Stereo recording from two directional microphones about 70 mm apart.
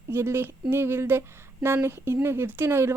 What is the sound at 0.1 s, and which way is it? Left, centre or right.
Speech, right.